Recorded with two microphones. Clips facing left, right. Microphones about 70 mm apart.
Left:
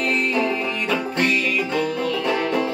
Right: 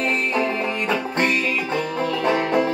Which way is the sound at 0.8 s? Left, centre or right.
Right.